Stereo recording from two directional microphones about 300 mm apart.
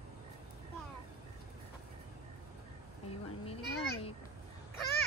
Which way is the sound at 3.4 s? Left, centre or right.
Centre.